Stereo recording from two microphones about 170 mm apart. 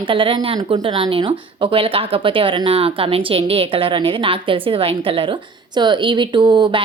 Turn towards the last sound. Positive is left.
turn(degrees=-25)  # may be behind; listen again after turning